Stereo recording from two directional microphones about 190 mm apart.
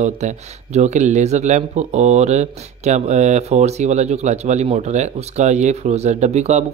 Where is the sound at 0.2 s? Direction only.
35° right (ahead or behind).